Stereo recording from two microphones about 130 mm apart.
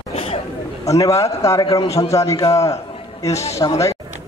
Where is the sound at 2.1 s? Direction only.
25° left (ahead or behind).